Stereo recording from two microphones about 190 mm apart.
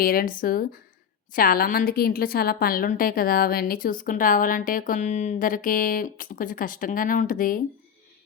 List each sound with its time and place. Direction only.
0.0 s a woman's voice: 50° left (ahead or behind)